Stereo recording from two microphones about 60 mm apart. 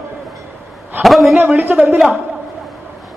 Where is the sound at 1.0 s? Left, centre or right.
Centre.